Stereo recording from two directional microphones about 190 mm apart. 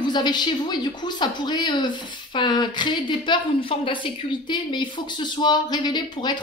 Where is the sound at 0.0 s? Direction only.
20° left (ahead or behind).